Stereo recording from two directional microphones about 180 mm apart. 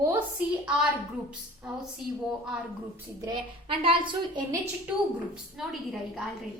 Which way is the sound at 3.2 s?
25° right (ahead or behind).